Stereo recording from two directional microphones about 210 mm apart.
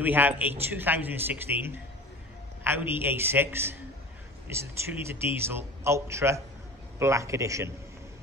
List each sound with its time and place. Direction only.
0.0 s a man's voice: 10° right (ahead or behind)
4.5 s a man's voice: 10° right (ahead or behind)